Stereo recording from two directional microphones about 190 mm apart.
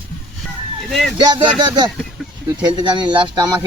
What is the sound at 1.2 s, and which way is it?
Speech, 20° right (ahead or behind).